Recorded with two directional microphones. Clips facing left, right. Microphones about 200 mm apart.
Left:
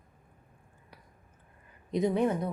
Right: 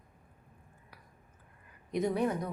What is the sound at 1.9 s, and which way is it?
Speech, 20° left (ahead or behind).